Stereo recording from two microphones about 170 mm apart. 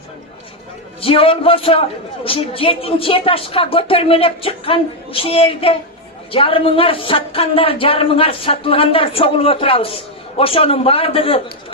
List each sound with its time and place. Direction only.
1.0 s a man's voice: 35° left (ahead or behind)